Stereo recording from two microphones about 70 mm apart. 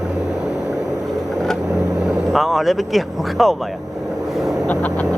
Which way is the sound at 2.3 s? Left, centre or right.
Centre.